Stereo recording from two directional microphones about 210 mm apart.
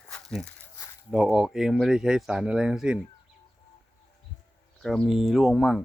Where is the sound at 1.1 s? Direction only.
5° right (ahead or behind).